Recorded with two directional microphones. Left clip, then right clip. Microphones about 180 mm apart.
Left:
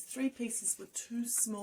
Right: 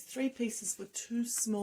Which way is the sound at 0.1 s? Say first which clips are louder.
Right 2 dB; 35° right (ahead or behind).